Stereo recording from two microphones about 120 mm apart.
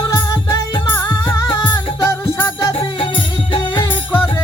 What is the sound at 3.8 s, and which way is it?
Music, 15° left (ahead or behind).